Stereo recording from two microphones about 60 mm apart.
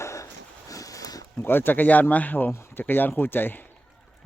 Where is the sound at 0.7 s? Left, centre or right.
Left.